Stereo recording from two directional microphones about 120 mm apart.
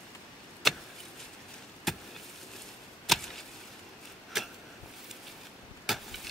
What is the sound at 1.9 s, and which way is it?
Vehicle, centre (ahead or behind).